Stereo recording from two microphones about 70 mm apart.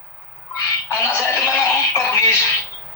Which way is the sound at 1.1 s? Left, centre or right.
Left.